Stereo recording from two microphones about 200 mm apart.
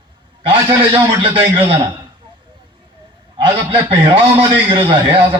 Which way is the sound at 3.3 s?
25° right (ahead or behind).